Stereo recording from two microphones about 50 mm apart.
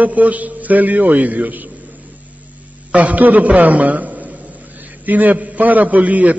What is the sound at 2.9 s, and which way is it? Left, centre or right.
A man's voice, right.